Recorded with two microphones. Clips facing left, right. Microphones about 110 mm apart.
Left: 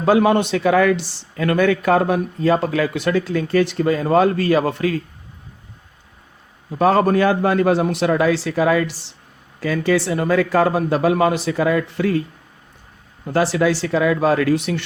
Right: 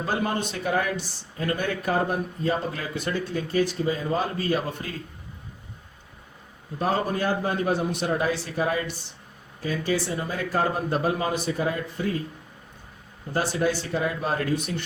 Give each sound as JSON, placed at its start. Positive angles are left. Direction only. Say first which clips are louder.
{"t": 0.0, "sound": "a man's voice", "louder": "left 12 dB", "side_deg": 75}
{"t": 6.7, "sound": "speech", "louder": "left 10 dB", "side_deg": 90}
{"t": 13.2, "sound": "speech", "louder": "left 7 dB", "side_deg": 90}